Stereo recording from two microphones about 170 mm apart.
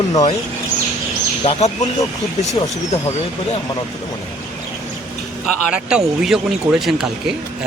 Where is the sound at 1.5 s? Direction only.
35° left (ahead or behind).